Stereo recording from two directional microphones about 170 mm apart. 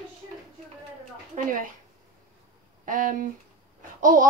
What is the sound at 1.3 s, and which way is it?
Speech, 50° right (ahead or behind).